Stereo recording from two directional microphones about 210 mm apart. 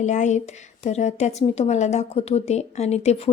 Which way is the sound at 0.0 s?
35° left (ahead or behind).